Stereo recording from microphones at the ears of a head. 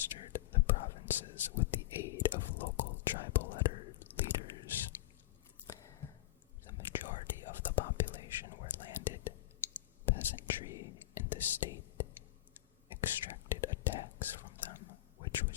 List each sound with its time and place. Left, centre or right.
0.0 s whispering: left
5.6 s chewing: left
6.7 s whispering: left